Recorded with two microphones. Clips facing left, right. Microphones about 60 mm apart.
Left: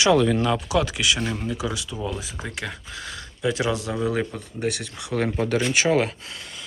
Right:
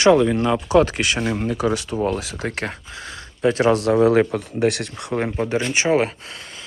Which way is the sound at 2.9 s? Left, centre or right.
Right.